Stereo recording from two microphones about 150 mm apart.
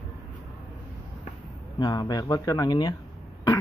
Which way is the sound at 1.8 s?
30° left (ahead or behind).